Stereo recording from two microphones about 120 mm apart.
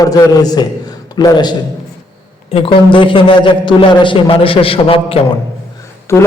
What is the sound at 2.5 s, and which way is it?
A man's voice, 50° left (ahead or behind).